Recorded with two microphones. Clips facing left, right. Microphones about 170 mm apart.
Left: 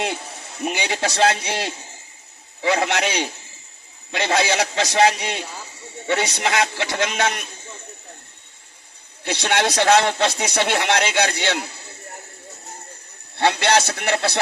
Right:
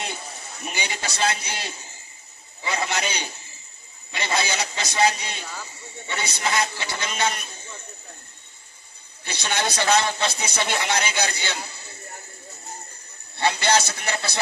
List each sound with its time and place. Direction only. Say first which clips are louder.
0.6 s a man's voice: left 8 dB; 90° left
9.2 s a man's voice: left 6 dB; 75° left (ahead or behind)
13.4 s speech: left 3 dB; 80° left